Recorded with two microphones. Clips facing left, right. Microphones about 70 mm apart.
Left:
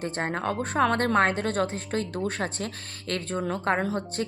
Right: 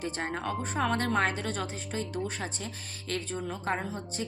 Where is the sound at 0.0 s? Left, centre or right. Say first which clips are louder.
Left 5 dB; left.